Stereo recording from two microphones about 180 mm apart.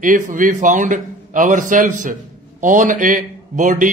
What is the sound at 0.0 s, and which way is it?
A man's voice, 50° right (ahead or behind).